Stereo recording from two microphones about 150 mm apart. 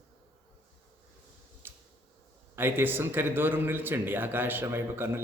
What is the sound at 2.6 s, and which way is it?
A man's voice, 15° right (ahead or behind).